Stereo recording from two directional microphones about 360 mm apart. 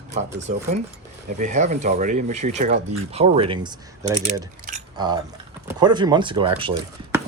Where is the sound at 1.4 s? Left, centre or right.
Centre.